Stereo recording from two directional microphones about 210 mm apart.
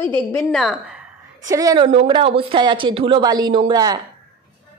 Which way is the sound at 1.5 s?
15° right (ahead or behind).